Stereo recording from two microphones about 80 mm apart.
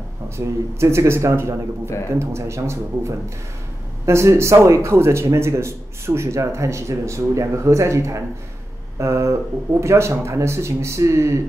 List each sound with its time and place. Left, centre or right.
0.7 s speech: right